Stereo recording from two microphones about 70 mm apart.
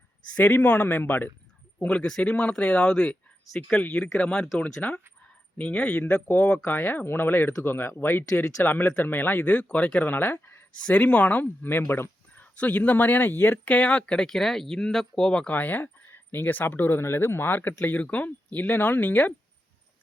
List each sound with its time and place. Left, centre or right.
0.3 s speech: left
1.8 s speech: centre; by 10.7 s left
10.8 s speech: centre